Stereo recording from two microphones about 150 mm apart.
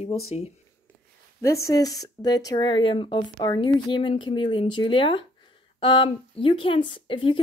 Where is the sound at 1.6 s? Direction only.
25° left (ahead or behind).